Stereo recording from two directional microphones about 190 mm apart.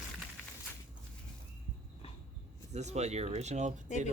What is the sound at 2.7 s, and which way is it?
Speech, 35° right (ahead or behind).